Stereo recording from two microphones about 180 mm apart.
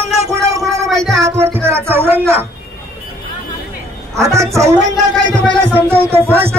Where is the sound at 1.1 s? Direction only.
15° right (ahead or behind).